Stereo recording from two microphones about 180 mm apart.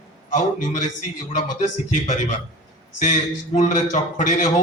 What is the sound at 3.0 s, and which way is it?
A man's voice, 40° left (ahead or behind).